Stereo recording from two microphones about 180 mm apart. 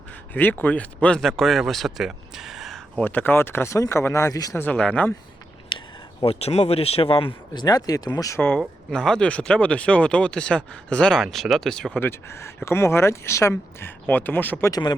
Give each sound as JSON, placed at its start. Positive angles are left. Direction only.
{"t": 0.6, "sound": "speech", "side_deg": 10}
{"t": 6.2, "sound": "speech", "side_deg": 35}
{"t": 14.7, "sound": "speech", "side_deg": 25}